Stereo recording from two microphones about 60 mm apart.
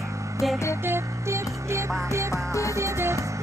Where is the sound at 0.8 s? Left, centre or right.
Right.